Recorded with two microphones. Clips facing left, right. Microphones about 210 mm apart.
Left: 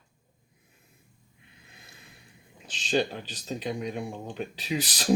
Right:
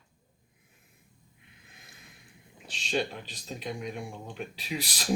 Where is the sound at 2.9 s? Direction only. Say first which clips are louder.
Left 4 dB; 35° left (ahead or behind).